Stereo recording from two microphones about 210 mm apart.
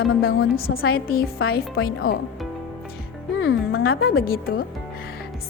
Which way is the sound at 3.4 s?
60° left (ahead or behind).